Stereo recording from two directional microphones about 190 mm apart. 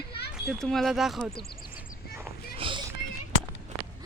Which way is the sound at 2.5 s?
25° right (ahead or behind).